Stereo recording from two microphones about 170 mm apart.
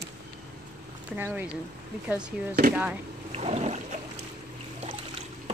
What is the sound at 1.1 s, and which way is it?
Speech, 10° right (ahead or behind).